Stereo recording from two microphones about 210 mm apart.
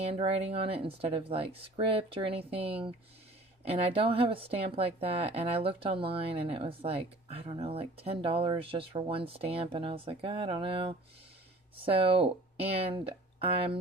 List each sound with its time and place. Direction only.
0.0 s a woman's voice: 25° right (ahead or behind)